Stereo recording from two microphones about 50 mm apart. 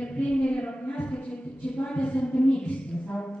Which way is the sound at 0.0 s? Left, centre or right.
Left.